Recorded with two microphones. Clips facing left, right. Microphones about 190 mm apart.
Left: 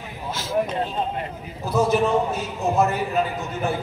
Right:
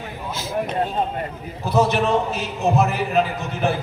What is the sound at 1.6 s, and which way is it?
A man's voice, 75° right (ahead or behind).